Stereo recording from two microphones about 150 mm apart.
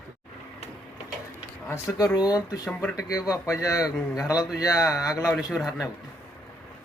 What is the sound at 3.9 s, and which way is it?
Speech, 5° right (ahead or behind).